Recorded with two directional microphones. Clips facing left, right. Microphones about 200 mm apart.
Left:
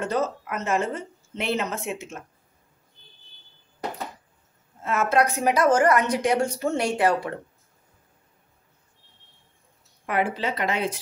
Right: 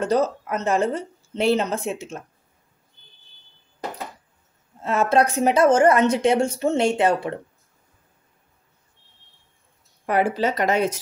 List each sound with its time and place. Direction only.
0.1 s a woman's voice: 35° right (ahead or behind)
4.8 s a woman's voice: 30° right (ahead or behind)
10.0 s a woman's voice: 40° right (ahead or behind)